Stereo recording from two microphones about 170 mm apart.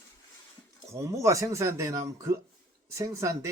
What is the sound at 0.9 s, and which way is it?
Speech, 15° right (ahead or behind).